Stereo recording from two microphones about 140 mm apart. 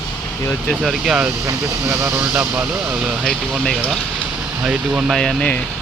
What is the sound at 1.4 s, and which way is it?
Speech, 20° right (ahead or behind).